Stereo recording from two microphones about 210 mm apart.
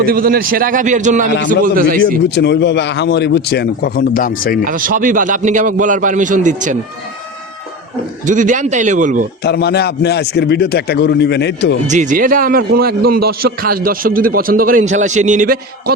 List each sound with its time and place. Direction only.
0.0 s a man's voice: 45° right (ahead or behind)
2.3 s a man's voice: 55° left (ahead or behind)
4.6 s a man's voice: 40° right (ahead or behind)
8.3 s a man's voice: 40° right (ahead or behind)
9.4 s a man's voice: 50° left (ahead or behind)
11.9 s a man's voice: 35° right (ahead or behind)